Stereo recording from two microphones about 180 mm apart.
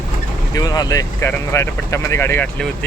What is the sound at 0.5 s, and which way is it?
Speech, 20° left (ahead or behind).